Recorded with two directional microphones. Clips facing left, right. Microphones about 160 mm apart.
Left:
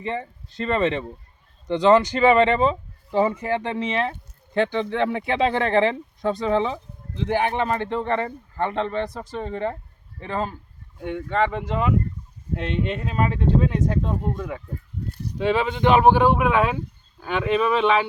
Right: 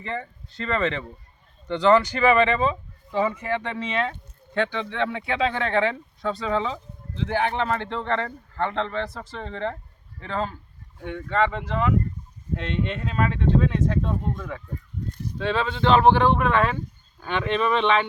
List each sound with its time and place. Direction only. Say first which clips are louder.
0.0 s speech: left 3 dB; 20° left (ahead or behind)
6.2 s speech: left 4 dB; 20° left (ahead or behind); by 18.0 s 5° left (ahead or behind)